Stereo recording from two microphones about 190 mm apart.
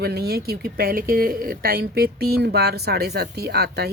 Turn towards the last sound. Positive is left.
turn(degrees=-55)  # may be behind; listen again after turning